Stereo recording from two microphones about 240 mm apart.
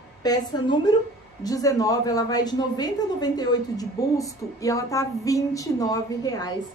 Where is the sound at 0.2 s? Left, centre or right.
Centre.